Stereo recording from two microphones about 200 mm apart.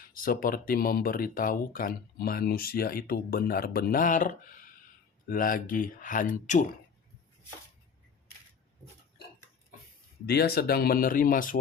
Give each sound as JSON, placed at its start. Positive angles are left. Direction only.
{"t": 0.0, "sound": "speech", "side_deg": 45}
{"t": 10.2, "sound": "speech", "side_deg": 50}